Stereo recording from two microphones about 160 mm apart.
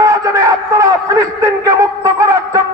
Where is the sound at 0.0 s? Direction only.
20° right (ahead or behind).